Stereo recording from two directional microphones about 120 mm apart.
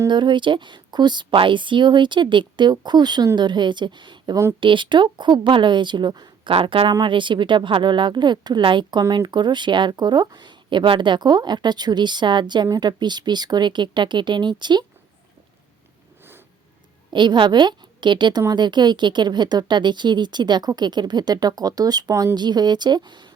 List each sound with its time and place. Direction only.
0.1 s speech: 40° right (ahead or behind)
6.5 s speech: 50° right (ahead or behind)
17.1 s a woman's voice: 40° right (ahead or behind)